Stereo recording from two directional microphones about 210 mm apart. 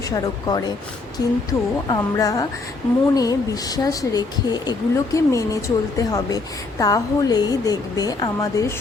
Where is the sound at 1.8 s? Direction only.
15° left (ahead or behind).